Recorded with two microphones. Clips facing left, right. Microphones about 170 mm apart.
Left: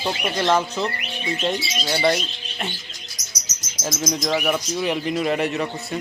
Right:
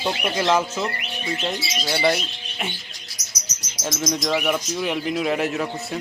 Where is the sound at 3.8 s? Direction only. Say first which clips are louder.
Even; centre (ahead or behind).